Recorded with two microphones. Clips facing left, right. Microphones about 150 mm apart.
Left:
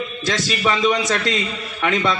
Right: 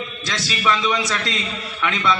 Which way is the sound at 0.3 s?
45° left (ahead or behind).